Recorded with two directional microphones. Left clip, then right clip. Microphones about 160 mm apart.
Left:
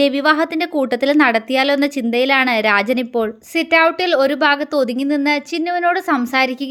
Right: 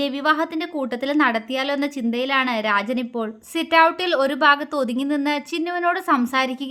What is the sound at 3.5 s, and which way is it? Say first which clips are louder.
Speech: left 2 dB; 15° left (ahead or behind).